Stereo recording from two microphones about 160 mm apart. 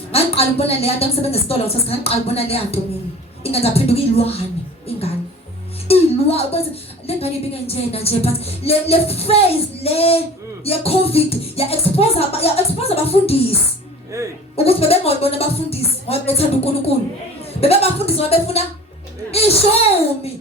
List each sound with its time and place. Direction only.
0.1 s a woman's voice: 40° left (ahead or behind)
14.1 s speech: 20° right (ahead or behind)
14.5 s a woman's voice: 40° left (ahead or behind)
17.6 s a woman's voice: 40° left (ahead or behind)